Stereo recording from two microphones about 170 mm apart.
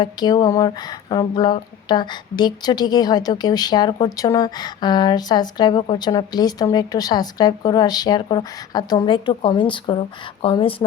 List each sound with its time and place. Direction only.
0.0 s speech: 25° left (ahead or behind)